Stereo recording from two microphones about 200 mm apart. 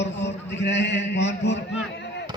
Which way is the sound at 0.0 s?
60° left (ahead or behind).